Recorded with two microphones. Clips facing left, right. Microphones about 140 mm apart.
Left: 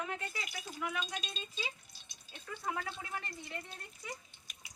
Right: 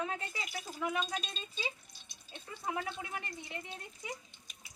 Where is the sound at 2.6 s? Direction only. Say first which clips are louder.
Right 2 dB; 20° right (ahead or behind).